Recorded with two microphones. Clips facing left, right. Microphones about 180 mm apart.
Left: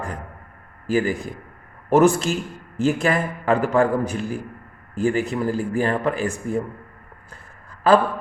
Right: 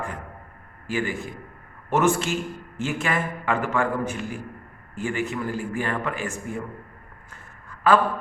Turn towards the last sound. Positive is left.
turn(degrees=35)  # may be behind; listen again after turning